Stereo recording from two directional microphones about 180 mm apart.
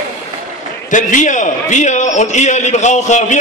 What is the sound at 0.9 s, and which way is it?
A man's voice, 45° left (ahead or behind).